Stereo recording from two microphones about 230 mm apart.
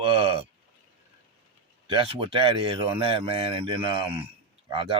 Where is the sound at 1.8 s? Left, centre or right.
Right.